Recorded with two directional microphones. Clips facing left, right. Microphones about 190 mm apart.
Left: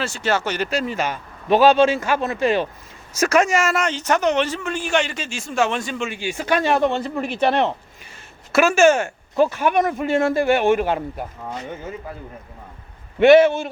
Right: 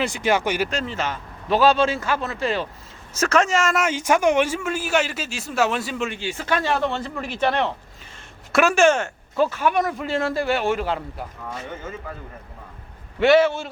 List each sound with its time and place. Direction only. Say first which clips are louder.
0.0 s speech: right 1 dB; 15° right (ahead or behind)
0.7 s speech: left 3 dB; 10° left (ahead or behind)
3.8 s a man's voice: even; 10° right (ahead or behind)
6.1 s speech: left 3 dB; 15° left (ahead or behind)
8.5 s speech: left 2 dB; centre (ahead or behind); by 11.3 s 20° left (ahead or behind)
13.1 s speech: left 5 dB; 20° left (ahead or behind)